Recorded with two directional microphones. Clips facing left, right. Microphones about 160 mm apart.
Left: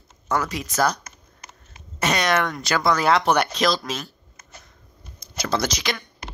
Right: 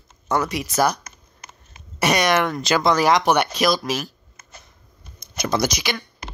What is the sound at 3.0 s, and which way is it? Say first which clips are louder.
Speech: right 2 dB; 10° right (ahead or behind).